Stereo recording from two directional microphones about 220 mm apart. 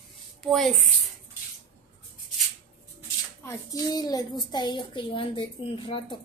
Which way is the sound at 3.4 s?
15° left (ahead or behind).